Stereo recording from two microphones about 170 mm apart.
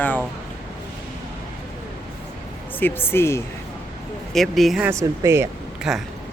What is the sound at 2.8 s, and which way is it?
Speech, 15° left (ahead or behind).